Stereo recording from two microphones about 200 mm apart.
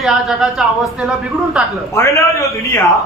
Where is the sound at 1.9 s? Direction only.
15° left (ahead or behind).